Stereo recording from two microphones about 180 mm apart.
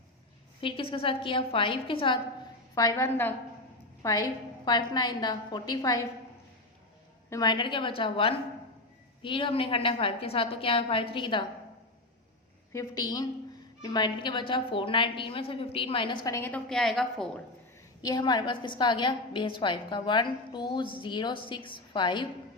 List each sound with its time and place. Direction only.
0.6 s a woman's voice: 30° left (ahead or behind)
2.7 s a woman's voice: 20° left (ahead or behind)
7.3 s a woman's voice: 20° left (ahead or behind)
12.7 s a woman's voice: 20° left (ahead or behind); by 17.3 s centre (ahead or behind)
18.0 s a woman's voice: 25° left (ahead or behind)